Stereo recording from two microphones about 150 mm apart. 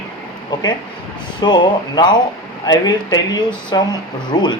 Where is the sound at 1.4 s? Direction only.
30° left (ahead or behind).